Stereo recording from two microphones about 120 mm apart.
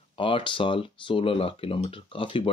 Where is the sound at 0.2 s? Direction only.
45° left (ahead or behind).